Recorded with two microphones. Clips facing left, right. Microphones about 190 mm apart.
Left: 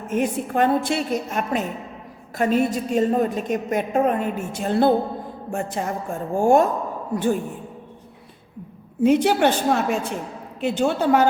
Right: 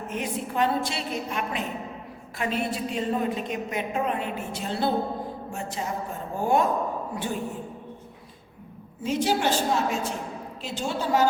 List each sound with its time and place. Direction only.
0.1 s a woman's voice: 50° left (ahead or behind)
9.0 s a woman's voice: 60° left (ahead or behind)